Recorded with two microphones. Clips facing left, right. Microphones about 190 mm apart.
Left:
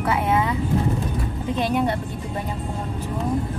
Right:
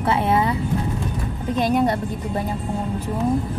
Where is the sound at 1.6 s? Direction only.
40° right (ahead or behind).